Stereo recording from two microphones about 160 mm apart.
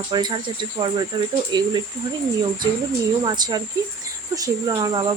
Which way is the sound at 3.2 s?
25° right (ahead or behind).